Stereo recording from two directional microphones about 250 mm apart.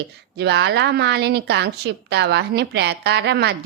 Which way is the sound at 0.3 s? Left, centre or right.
Right.